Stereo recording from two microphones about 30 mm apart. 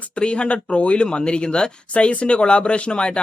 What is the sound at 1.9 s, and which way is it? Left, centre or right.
Speech, left.